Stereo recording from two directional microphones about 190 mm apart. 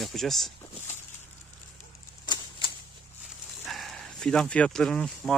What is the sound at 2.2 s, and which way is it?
Typewriter, 25° left (ahead or behind).